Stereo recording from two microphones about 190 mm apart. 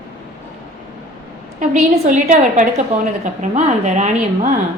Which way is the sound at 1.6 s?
40° right (ahead or behind).